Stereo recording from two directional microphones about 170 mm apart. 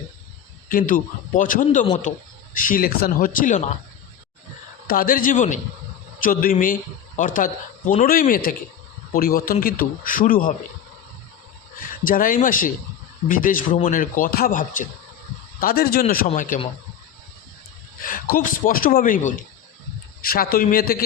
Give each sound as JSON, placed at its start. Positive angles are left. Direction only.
{"t": 0.7, "sound": "speech", "side_deg": 55}
{"t": 4.9, "sound": "a man's voice", "side_deg": 55}
{"t": 12.0, "sound": "speech", "side_deg": 55}
{"t": 15.6, "sound": "a man's voice", "side_deg": 60}
{"t": 18.0, "sound": "a man's voice", "side_deg": 55}